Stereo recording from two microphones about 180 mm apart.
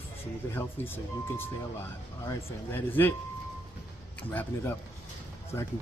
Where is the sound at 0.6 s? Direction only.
10° left (ahead or behind).